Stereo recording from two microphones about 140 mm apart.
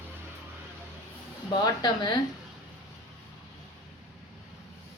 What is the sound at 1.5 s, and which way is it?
Speech, 30° left (ahead or behind).